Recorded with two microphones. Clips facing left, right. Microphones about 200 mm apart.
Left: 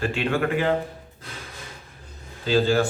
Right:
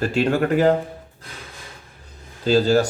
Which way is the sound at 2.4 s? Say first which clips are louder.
Right 4 dB; 40° right (ahead or behind).